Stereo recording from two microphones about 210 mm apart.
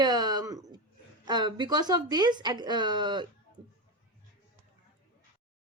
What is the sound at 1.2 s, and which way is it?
Speech, 20° right (ahead or behind).